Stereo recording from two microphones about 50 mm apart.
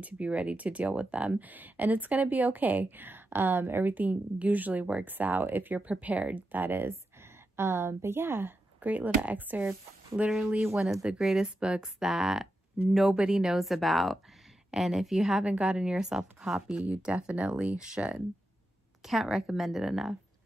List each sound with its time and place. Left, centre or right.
0.0 s speech: right
5.8 s speech: right
6.9 s speech: right
8.7 s speech: right
10.8 s speech: centre
11.4 s speech: centre
16.7 s speech: right
19.0 s speech: centre